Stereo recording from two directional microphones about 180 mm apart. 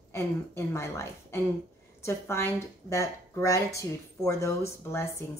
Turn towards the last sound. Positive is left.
turn(degrees=15)  # may be behind; listen again after turning